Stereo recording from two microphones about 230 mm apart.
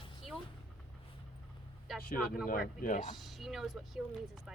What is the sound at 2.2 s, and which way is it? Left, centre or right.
Speech, centre.